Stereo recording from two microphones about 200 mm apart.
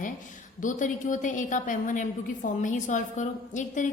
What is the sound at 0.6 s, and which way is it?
A woman's voice, 40° left (ahead or behind).